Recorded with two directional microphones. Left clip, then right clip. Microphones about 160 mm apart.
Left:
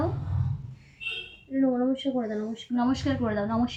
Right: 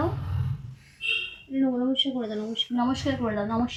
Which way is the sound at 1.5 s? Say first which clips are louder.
Right 1 dB; 15° left (ahead or behind).